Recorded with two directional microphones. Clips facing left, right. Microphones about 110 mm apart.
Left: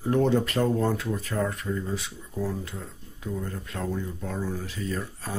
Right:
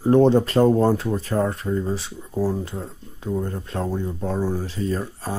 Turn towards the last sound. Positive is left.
turn(degrees=-30)  # may be behind; listen again after turning